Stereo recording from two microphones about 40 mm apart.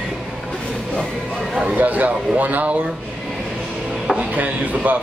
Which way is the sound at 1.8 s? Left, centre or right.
Right.